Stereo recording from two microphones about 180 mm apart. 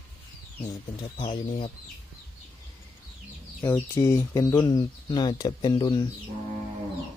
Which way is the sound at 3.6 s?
15° left (ahead or behind).